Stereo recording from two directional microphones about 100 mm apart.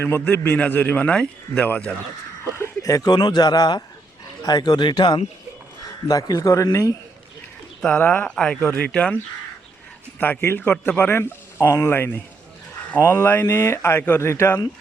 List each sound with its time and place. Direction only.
0.0 s a man's voice: 25° left (ahead or behind)
2.8 s a man's voice: 35° left (ahead or behind)
6.1 s a man's voice: 35° left (ahead or behind)
7.8 s a man's voice: 10° left (ahead or behind)
10.2 s speech: 20° left (ahead or behind)